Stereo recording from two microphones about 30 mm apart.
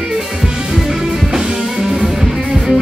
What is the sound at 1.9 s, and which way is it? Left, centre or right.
Music, centre.